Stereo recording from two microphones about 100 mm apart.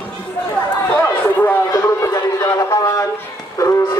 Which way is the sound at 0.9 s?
20° left (ahead or behind).